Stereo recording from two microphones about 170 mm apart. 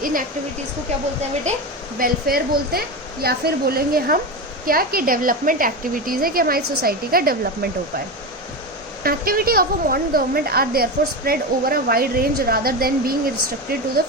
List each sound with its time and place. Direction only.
0.0 s speech: 55° right (ahead or behind)
1.5 s a woman's voice: 40° right (ahead or behind)
2.0 s a woman's voice: 60° right (ahead or behind)
9.0 s a woman's voice: 60° right (ahead or behind)